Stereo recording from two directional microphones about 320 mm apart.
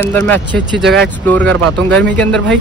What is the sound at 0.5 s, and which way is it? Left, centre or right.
Speech, right.